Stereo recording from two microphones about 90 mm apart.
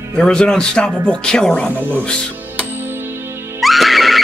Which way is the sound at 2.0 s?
10° left (ahead or behind).